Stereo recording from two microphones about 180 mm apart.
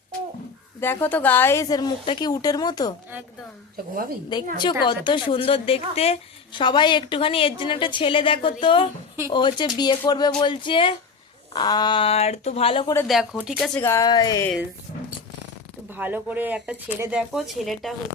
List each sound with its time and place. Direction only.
0.8 s a woman's voice: 10° left (ahead or behind)
4.3 s a woman's voice: 25° left (ahead or behind)
13.1 s speech: centre (ahead or behind)
13.6 s speech: 10° left (ahead or behind)
15.9 s speech: 10° right (ahead or behind)